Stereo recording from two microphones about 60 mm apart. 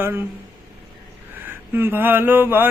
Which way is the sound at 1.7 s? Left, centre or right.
Right.